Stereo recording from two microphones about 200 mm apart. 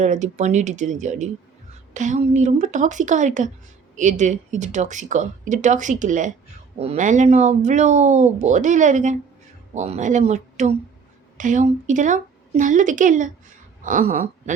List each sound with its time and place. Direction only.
0.0 s speech: 35° right (ahead or behind)